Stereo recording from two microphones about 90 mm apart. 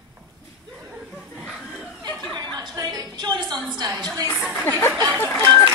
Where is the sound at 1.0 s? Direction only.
5° right (ahead or behind).